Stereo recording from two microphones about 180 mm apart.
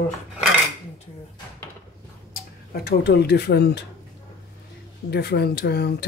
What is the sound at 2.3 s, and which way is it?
Speech, 55° left (ahead or behind).